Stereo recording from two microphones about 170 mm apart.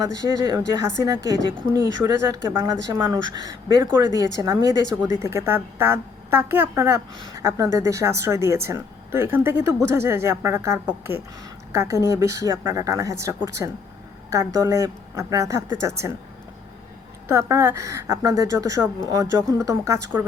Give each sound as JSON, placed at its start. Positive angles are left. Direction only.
{"t": 0.0, "sound": "a woman's voice", "side_deg": -20}
{"t": 17.2, "sound": "a woman's voice", "side_deg": -15}